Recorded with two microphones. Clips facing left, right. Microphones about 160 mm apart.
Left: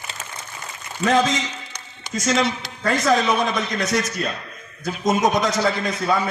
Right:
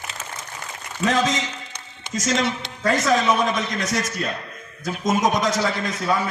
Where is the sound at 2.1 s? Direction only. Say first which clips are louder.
Left 2 dB; 45° right (ahead or behind).